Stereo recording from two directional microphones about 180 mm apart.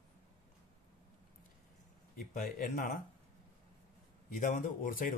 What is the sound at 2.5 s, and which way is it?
Speech, 50° left (ahead or behind).